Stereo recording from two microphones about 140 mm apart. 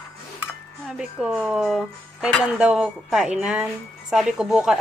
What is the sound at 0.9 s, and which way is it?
Speech, 5° right (ahead or behind).